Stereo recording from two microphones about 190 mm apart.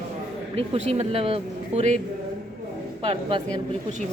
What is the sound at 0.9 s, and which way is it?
Speech, 35° right (ahead or behind).